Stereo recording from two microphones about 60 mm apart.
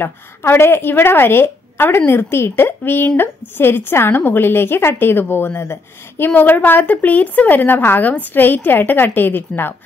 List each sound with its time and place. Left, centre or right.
0.0 s a woman's voice: left